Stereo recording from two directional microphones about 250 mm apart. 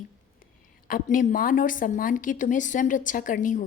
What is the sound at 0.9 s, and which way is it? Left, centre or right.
A woman's voice, left.